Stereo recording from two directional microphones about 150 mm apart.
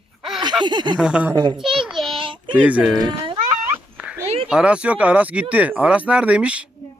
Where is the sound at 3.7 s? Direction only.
10° right (ahead or behind).